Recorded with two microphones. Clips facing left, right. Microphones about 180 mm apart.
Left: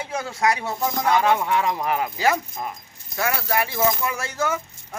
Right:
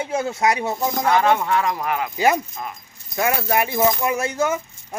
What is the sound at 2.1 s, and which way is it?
Speech, 20° right (ahead or behind).